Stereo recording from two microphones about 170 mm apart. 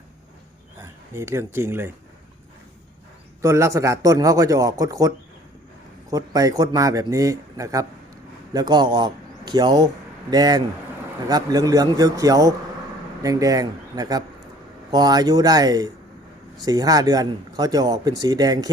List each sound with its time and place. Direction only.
0.8 s speech: 15° right (ahead or behind)
3.4 s speech: 15° right (ahead or behind)